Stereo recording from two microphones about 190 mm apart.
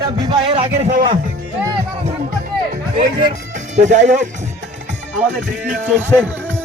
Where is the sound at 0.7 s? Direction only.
40° right (ahead or behind).